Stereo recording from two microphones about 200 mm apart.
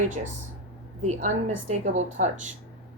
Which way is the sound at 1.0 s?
35° right (ahead or behind).